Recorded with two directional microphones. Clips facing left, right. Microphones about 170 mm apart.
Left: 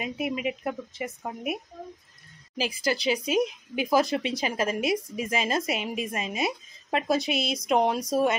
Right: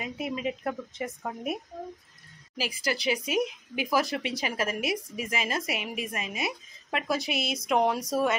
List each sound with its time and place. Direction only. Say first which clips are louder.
0.0 s a woman's voice: left 2 dB; 20° left (ahead or behind); by 1.6 s 5° left (ahead or behind)
2.8 s speech: left 2 dB; 25° left (ahead or behind)